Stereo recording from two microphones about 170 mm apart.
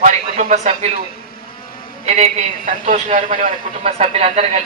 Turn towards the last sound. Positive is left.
turn(degrees=-35)  # may be behind; listen again after turning